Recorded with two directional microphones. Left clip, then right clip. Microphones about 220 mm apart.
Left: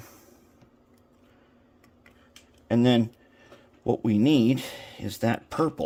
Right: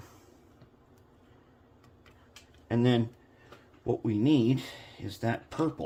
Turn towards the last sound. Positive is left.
turn(degrees=50)  # may be behind; listen again after turning